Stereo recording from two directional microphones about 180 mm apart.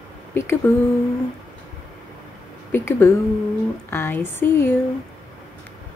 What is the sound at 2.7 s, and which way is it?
A woman's voice, 15° left (ahead or behind).